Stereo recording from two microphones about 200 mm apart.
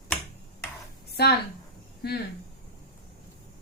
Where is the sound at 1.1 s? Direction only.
55° left (ahead or behind).